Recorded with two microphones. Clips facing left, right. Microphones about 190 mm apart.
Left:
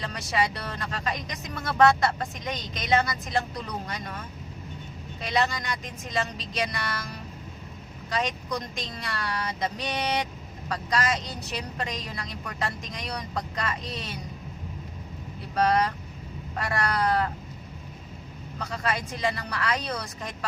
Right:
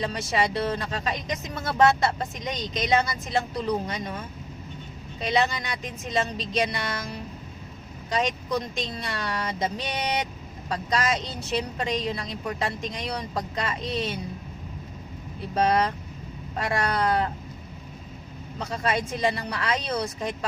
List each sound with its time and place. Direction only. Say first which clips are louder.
0.0 s a woman's voice: right 2 dB; 25° right (ahead or behind)
5.2 s a woman's voice: right 2 dB; 25° right (ahead or behind)
8.1 s a woman's voice: right 3 dB; 20° right (ahead or behind)
15.5 s a woman's voice: right 1 dB; 25° right (ahead or behind)
18.6 s a woman's voice: right 3 dB; 25° right (ahead or behind)